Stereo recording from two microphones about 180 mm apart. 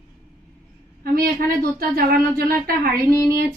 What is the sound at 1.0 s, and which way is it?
A woman's voice, 55° right (ahead or behind).